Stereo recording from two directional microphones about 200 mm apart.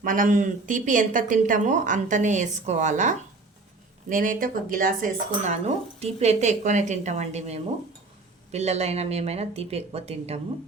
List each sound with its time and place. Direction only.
0.0 s speech: 40° right (ahead or behind)